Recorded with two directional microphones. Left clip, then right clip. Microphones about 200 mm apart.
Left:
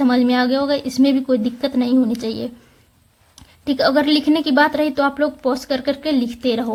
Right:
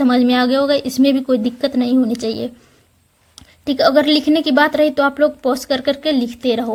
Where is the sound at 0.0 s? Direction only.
15° right (ahead or behind).